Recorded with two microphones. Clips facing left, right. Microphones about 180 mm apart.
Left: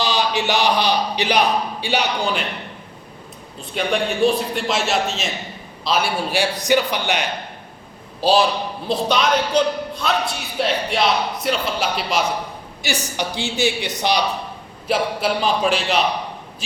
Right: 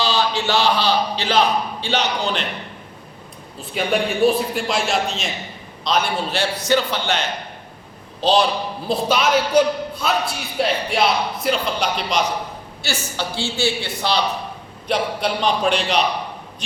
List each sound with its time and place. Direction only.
0.0 s a man's voice: 15° left (ahead or behind)
3.6 s a man's voice: 5° right (ahead or behind)
8.9 s a man's voice: centre (ahead or behind)
12.8 s a man's voice: 15° left (ahead or behind)
14.8 s a man's voice: 5° left (ahead or behind)